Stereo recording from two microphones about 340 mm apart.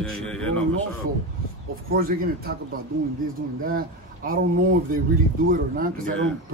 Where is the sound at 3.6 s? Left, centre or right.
Right.